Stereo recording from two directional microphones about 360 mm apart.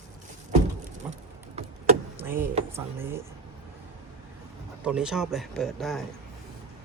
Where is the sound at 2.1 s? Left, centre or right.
Centre.